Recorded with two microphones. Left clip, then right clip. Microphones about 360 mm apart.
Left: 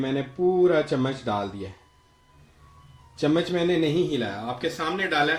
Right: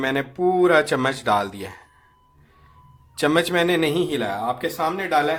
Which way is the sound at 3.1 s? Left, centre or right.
Right.